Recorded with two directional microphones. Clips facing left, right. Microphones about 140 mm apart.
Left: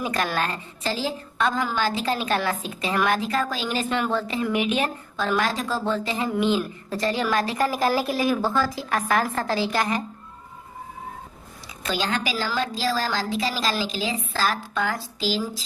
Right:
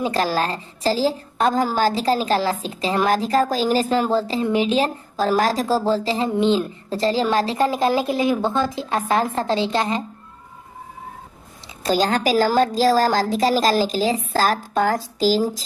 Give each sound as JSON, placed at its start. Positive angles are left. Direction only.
{"t": 0.0, "sound": "a woman's voice", "side_deg": -30}
{"t": 11.8, "sound": "a woman's voice", "side_deg": -40}